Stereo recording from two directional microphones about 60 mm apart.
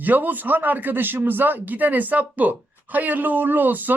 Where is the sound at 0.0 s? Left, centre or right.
Right.